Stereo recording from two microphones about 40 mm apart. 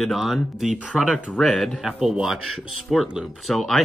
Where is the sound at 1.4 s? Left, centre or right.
Centre.